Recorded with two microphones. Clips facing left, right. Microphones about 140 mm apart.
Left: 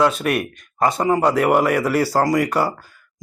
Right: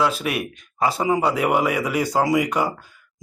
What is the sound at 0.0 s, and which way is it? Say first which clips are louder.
A man's voice: left 4 dB; centre (ahead or behind).